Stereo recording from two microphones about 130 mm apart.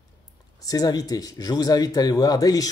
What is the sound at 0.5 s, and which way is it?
Speech, 30° left (ahead or behind).